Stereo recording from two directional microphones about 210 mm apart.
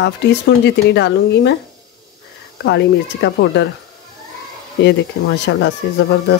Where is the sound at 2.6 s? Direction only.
55° left (ahead or behind).